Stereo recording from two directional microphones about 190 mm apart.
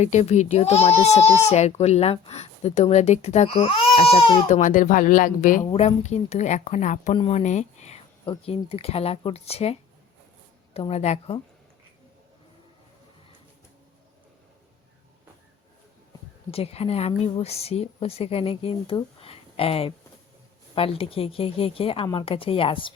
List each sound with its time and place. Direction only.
0.0 s speech: 35° left (ahead or behind)
5.6 s speech: 35° left (ahead or behind)
10.8 s speech: 30° left (ahead or behind)
16.5 s a woman's voice: 30° left (ahead or behind)